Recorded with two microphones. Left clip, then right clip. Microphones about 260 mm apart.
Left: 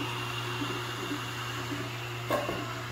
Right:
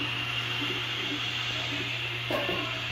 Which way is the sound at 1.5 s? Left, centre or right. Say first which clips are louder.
Right 5 dB; right.